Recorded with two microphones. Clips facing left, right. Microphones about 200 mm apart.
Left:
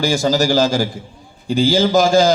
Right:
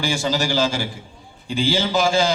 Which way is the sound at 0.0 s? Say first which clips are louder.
Left 6 dB; 40° left (ahead or behind).